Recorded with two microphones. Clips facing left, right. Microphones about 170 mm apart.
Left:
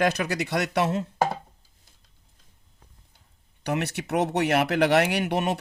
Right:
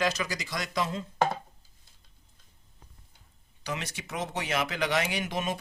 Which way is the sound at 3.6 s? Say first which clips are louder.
Left 9 dB; 65° left (ahead or behind).